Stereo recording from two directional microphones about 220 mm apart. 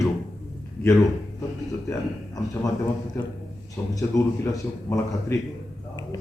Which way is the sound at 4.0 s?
15° left (ahead or behind).